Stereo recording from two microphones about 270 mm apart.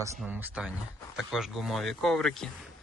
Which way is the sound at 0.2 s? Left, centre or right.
Centre.